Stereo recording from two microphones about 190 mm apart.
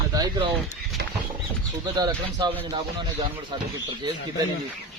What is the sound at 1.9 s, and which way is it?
Speech, 20° right (ahead or behind).